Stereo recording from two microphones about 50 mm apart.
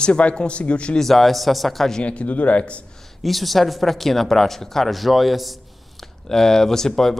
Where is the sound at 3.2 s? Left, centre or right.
Centre.